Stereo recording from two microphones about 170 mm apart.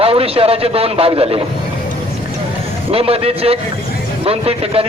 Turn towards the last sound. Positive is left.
turn(degrees=-35)  # may be behind; listen again after turning